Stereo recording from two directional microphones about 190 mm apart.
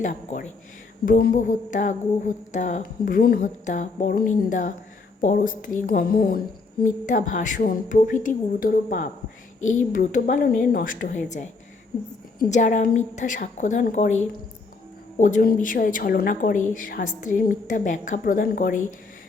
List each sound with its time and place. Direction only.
0.0 s a woman's voice: 45° left (ahead or behind)